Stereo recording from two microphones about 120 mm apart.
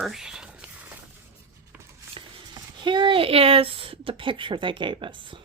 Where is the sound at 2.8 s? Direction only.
40° right (ahead or behind).